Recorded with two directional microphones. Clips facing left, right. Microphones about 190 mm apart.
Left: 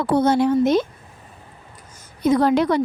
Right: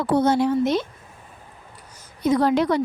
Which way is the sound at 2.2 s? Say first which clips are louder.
Left 2 dB; 55° left (ahead or behind).